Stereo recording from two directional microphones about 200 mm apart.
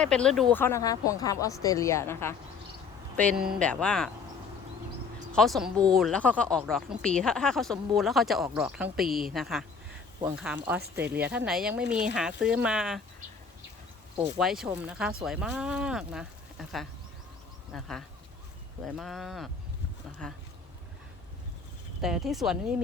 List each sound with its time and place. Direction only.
0.0 s speech: 5° left (ahead or behind)
5.3 s speech: centre (ahead or behind)
14.3 s speech: centre (ahead or behind)
22.0 s speech: centre (ahead or behind)